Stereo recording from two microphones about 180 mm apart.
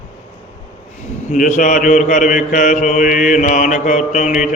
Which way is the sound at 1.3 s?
45° left (ahead or behind).